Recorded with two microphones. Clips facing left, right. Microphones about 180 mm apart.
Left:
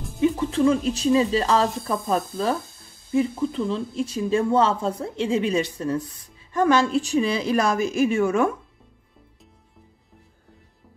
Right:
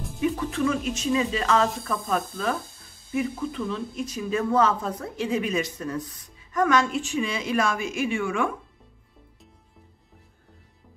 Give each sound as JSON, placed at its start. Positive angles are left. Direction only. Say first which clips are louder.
{"t": 0.2, "sound": "speech", "louder": "left 5 dB", "side_deg": 25}